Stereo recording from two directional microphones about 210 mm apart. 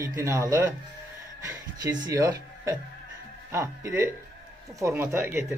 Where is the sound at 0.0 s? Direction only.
15° right (ahead or behind).